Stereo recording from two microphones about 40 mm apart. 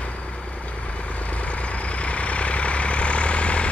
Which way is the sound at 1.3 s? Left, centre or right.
Left.